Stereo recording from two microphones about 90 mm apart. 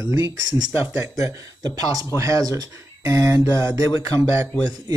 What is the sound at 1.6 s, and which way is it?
Speech, 45° right (ahead or behind).